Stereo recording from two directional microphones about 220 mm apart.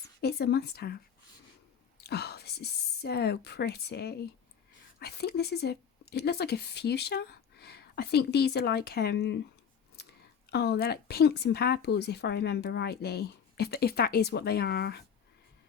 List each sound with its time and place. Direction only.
0.2 s speech: 45° left (ahead or behind)
2.0 s speech: 45° left (ahead or behind)